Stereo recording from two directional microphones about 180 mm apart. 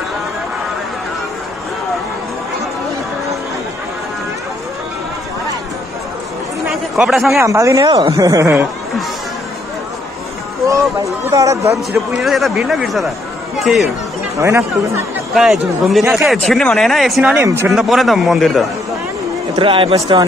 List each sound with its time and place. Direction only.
6.7 s chatter: centre (ahead or behind)
7.3 s a woman's voice: 15° right (ahead or behind)
11.2 s a woman's voice: 15° right (ahead or behind)
12.2 s speech: centre (ahead or behind)
14.4 s a woman's voice: 15° right (ahead or behind)
15.3 s speech: centre (ahead or behind)
17.4 s a woman's voice: 15° right (ahead or behind)
17.6 s speech: centre (ahead or behind)
19.5 s speech: 25° right (ahead or behind)